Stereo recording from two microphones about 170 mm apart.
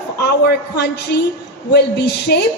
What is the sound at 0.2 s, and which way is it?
A man's voice, 75° left (ahead or behind).